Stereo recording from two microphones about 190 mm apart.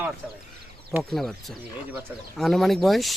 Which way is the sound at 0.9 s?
10° right (ahead or behind).